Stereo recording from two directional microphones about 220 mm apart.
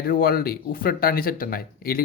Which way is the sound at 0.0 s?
40° left (ahead or behind).